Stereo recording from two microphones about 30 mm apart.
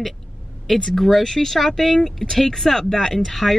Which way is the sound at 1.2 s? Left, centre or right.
Centre.